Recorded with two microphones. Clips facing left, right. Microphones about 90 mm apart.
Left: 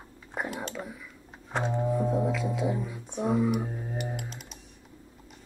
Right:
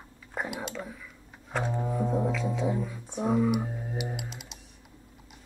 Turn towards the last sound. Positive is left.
turn(degrees=-5)  # may be behind; listen again after turning